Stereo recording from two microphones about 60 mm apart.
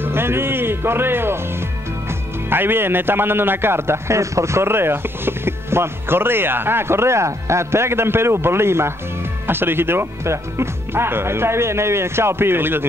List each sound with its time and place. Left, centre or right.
0.0 s speech: right